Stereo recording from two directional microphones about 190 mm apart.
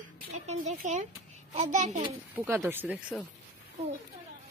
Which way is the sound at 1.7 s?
40° right (ahead or behind).